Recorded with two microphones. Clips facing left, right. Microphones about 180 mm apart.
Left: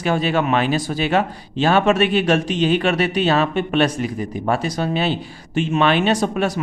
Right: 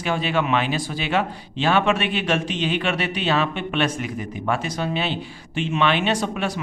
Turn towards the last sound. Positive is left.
turn(degrees=45)  # may be behind; listen again after turning